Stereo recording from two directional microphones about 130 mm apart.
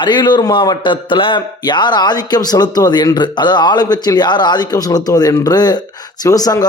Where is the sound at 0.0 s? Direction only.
35° left (ahead or behind).